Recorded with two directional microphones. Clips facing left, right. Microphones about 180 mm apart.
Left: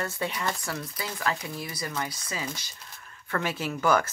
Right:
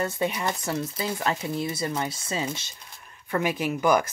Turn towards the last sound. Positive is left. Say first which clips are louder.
# right 2 dB
turn(degrees=-15)  # may be behind; listen again after turning